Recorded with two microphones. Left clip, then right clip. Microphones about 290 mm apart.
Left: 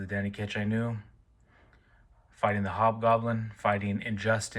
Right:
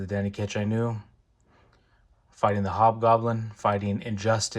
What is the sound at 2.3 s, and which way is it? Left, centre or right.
Speech, centre.